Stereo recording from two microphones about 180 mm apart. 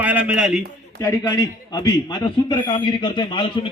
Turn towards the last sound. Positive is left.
turn(degrees=25)  # may be behind; listen again after turning